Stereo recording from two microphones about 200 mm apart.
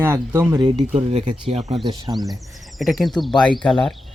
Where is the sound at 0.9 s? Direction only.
35° right (ahead or behind).